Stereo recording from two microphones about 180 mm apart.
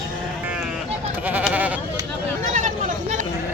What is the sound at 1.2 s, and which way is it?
Goat, 10° right (ahead or behind).